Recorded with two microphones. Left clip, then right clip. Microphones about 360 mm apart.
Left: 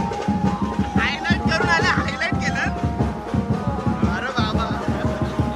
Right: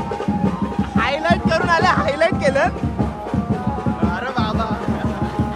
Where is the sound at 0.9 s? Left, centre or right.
Centre.